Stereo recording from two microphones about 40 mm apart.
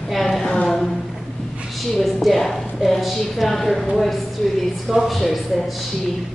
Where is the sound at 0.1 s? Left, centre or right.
Centre.